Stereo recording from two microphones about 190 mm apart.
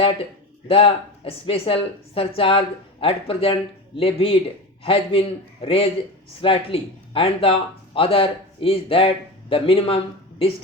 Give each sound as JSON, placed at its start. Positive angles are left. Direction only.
{"t": 0.7, "sound": "speech", "side_deg": 30}